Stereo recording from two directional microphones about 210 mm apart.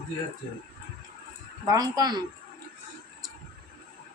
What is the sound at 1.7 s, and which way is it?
Speech, 20° right (ahead or behind).